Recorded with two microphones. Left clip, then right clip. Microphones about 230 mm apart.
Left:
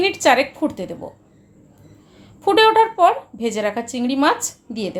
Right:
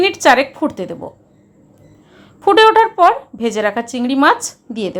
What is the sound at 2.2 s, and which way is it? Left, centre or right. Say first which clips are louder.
Speech: right 5 dB; centre.